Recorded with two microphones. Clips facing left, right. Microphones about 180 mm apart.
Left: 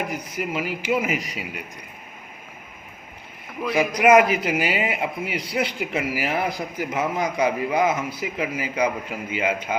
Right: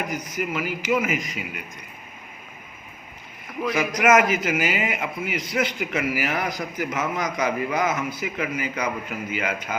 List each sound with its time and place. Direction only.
0.1 s a man's voice: 30° left (ahead or behind)
3.8 s a man's voice: 30° left (ahead or behind)